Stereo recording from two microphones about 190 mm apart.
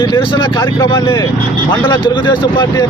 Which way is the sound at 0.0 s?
25° left (ahead or behind).